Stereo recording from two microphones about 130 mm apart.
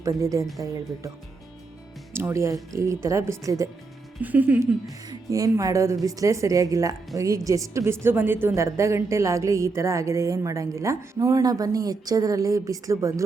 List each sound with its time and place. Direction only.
0.0 s a woman's voice: 25° right (ahead or behind)
2.1 s a woman's voice: 20° right (ahead or behind)
4.2 s speech: 15° right (ahead or behind)
5.0 s a woman's voice: 25° right (ahead or behind)